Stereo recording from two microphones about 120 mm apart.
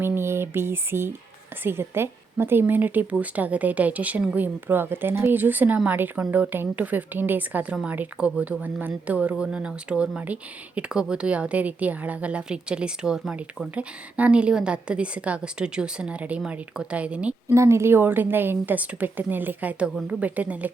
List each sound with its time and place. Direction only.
0.0 s a sound: 20° right (ahead or behind)
1.6 s a woman's voice: 20° right (ahead or behind)
17.5 s a woman's voice: 25° right (ahead or behind)